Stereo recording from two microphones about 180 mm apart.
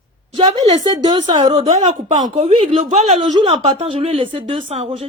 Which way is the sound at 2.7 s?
40° right (ahead or behind).